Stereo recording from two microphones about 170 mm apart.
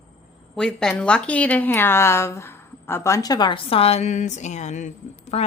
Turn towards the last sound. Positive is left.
turn(degrees=40)  # may be behind; listen again after turning